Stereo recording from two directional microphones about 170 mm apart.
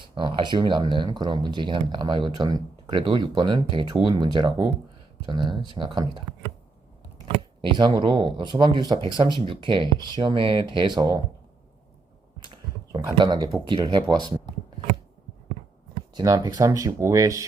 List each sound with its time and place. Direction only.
0.0 s speech: 30° right (ahead or behind)
7.6 s speech: 25° right (ahead or behind)
12.4 s speech: 25° right (ahead or behind)
16.1 s speech: 20° right (ahead or behind)